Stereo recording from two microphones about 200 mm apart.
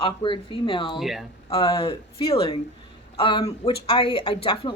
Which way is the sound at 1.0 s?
Centre (ahead or behind).